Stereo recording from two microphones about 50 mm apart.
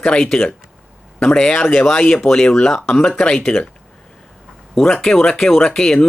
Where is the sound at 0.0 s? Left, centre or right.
Centre.